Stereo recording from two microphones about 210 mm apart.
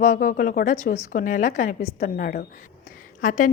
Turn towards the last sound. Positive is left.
turn(degrees=40)  # may be behind; listen again after turning